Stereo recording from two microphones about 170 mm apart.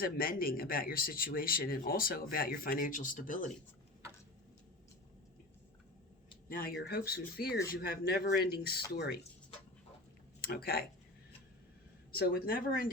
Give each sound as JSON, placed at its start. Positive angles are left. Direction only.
{"t": 0.0, "sound": "speech", "side_deg": 60}
{"t": 6.5, "sound": "speech", "side_deg": 60}
{"t": 10.4, "sound": "speech", "side_deg": 65}
{"t": 12.1, "sound": "speech", "side_deg": 60}